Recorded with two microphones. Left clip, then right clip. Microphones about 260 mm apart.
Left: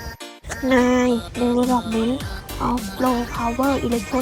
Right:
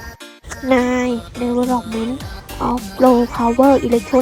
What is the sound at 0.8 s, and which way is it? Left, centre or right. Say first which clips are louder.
Speech: even; centre.